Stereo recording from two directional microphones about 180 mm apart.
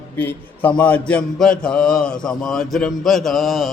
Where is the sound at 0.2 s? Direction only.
10° left (ahead or behind).